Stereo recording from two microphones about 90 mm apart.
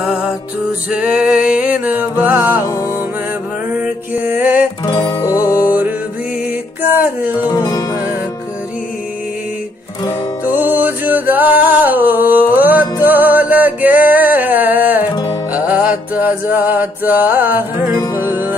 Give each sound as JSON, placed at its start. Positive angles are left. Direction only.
{"t": 0.0, "sound": "music", "side_deg": -10}
{"t": 3.7, "sound": "mantra", "side_deg": -15}
{"t": 5.2, "sound": "music", "side_deg": 40}
{"t": 5.6, "sound": "music", "side_deg": -20}
{"t": 7.4, "sound": "music", "side_deg": 45}
{"t": 10.4, "sound": "music", "side_deg": -20}
{"t": 15.5, "sound": "mantra", "side_deg": -15}